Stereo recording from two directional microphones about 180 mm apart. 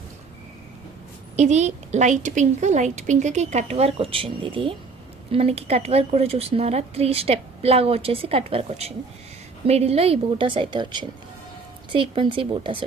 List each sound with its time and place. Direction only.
1.4 s a woman's voice: 40° right (ahead or behind)